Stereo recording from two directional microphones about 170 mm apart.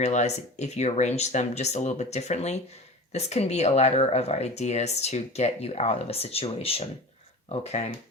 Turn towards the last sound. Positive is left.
turn(degrees=40)  # may be behind; listen again after turning